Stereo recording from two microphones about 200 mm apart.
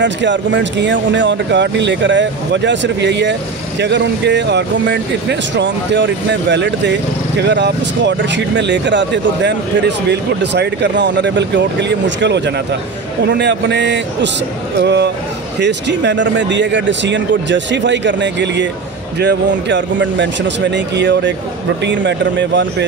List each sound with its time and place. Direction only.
0.0 s speech: 65° right (ahead or behind)